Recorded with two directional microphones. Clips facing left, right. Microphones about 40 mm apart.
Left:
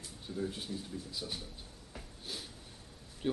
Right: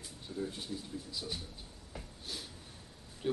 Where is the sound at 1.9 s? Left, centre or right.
Centre.